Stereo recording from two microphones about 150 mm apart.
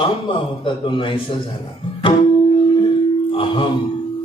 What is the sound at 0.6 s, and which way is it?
Speech, 35° left (ahead or behind).